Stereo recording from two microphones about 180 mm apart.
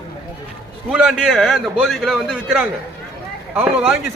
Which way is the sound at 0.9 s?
5° right (ahead or behind).